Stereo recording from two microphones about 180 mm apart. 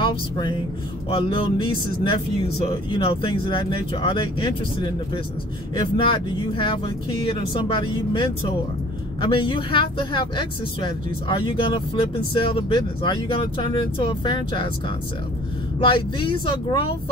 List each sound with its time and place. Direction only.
0.0 s a woman's voice: 25° left (ahead or behind)
15.8 s a woman's voice: 25° left (ahead or behind)